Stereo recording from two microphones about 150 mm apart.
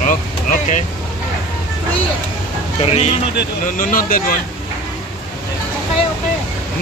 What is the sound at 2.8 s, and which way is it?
Speech, 40° left (ahead or behind).